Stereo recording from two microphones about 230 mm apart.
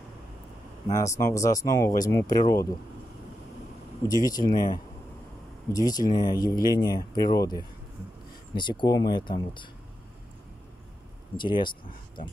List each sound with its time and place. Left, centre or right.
0.8 s speech: centre
4.1 s speech: centre
5.7 s speech: centre
8.5 s speech: centre
11.3 s speech: centre